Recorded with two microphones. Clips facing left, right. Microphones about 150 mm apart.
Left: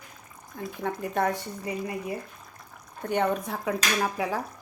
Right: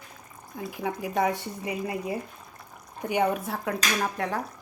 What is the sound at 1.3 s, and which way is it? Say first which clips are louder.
A woman's voice: even; 20° right (ahead or behind).